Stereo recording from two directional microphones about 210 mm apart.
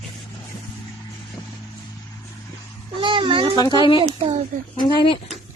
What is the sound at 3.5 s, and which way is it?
Speech, 20° left (ahead or behind).